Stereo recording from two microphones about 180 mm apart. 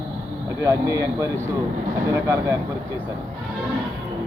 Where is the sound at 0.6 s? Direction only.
15° right (ahead or behind).